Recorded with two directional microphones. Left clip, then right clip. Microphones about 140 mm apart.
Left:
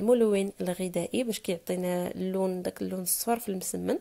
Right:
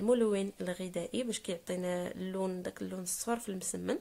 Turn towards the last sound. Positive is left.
turn(degrees=30)  # may be behind; listen again after turning